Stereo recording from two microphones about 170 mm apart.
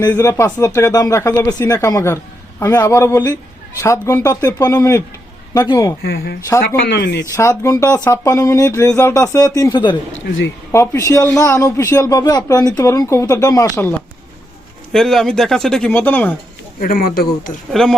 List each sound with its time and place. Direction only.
0.1 s a man's voice: 20° left (ahead or behind)
6.0 s speech: 70° left (ahead or behind)
7.3 s speech: 15° left (ahead or behind)
10.2 s speech: 90° left
10.7 s a man's voice: 15° left (ahead or behind)
14.9 s speech: centre (ahead or behind)
16.8 s speech: 55° left (ahead or behind)
17.7 s speech: centre (ahead or behind)